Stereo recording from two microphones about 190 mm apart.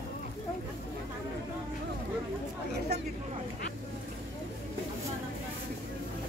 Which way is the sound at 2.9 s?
55° right (ahead or behind).